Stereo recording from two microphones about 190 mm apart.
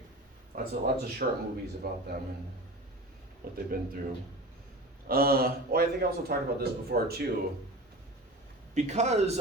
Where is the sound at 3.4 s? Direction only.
50° right (ahead or behind).